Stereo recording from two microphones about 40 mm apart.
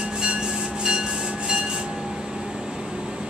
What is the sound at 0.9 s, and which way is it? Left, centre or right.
Train, right.